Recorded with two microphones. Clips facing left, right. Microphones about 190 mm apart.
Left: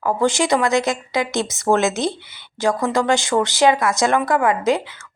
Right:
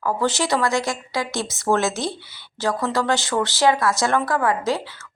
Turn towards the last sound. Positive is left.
turn(degrees=20)  # may be behind; listen again after turning